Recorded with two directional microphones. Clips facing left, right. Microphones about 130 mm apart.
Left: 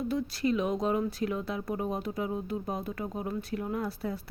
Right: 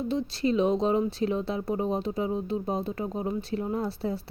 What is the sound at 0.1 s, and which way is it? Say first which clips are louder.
Speech: right 3 dB; 25° right (ahead or behind).